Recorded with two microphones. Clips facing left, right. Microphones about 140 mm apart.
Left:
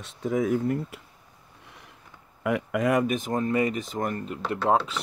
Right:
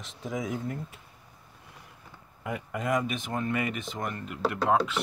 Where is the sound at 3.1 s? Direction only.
45° left (ahead or behind).